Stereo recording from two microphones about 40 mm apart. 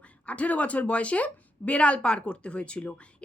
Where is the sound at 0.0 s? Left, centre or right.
Left.